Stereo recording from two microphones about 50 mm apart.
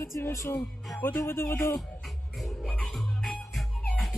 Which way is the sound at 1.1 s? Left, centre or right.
Left.